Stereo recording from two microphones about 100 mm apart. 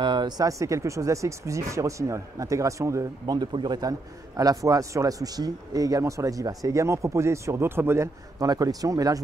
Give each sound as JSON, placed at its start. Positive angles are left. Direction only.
{"t": 0.0, "sound": "speech", "side_deg": -50}
{"t": 0.5, "sound": "a man's voice", "side_deg": -30}
{"t": 3.3, "sound": "a man's voice", "side_deg": -45}
{"t": 8.4, "sound": "a man's voice", "side_deg": -35}